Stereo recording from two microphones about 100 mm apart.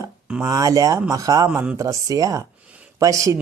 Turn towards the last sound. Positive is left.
turn(degrees=-35)  # may be behind; listen again after turning